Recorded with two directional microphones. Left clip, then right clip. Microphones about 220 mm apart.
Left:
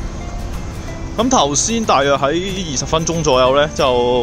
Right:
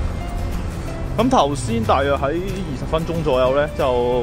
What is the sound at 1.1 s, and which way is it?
Speech, 15° left (ahead or behind).